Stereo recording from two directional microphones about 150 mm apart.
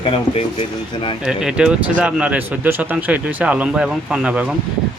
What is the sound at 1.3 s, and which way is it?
A man's voice, 5° right (ahead or behind).